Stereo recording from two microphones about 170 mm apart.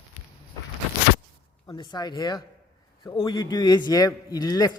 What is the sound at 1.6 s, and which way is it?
A man's voice, 25° left (ahead or behind).